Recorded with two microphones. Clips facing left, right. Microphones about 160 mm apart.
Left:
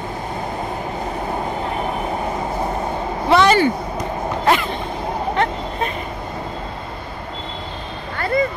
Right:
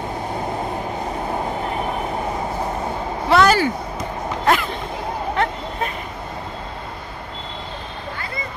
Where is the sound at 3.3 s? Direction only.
Centre (ahead or behind).